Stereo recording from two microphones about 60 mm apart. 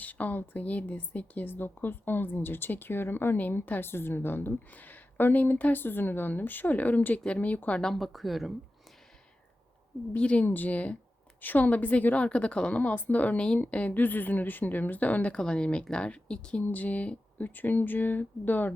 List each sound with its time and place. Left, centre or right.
0.0 s a woman's voice: left
7.8 s a woman's voice: centre
10.2 s a woman's voice: centre
10.4 s a woman's voice: left